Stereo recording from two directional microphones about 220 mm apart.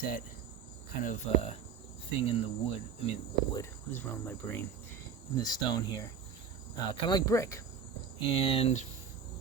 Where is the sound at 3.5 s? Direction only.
10° left (ahead or behind).